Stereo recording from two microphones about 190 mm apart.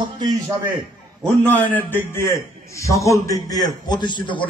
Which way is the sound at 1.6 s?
10° left (ahead or behind).